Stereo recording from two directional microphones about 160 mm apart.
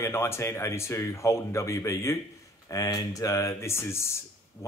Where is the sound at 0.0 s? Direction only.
15° left (ahead or behind).